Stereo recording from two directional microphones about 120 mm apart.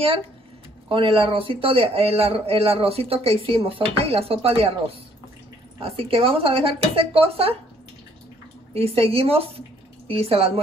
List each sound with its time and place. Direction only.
0.8 s a man's voice: 50° right (ahead or behind)
8.7 s a woman's voice: 55° right (ahead or behind)